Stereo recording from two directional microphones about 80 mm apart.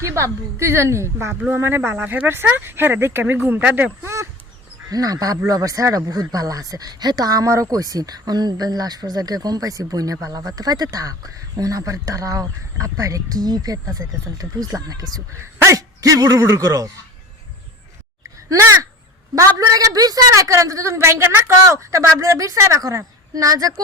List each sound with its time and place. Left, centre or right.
0.0 s a woman's voice: right; by 3.9 s centre
4.0 s speech: right
4.9 s speech: right
15.5 s a sound: right
16.0 s speech: right
19.4 s a woman's voice: right